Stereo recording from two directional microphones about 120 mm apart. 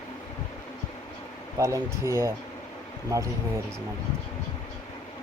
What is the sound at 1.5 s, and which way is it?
Speech, 25° right (ahead or behind).